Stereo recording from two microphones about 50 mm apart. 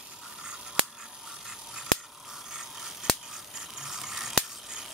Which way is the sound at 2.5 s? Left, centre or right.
Centre.